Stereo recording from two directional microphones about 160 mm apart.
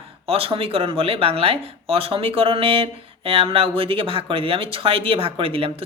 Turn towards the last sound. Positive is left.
turn(degrees=-35)  # may be behind; listen again after turning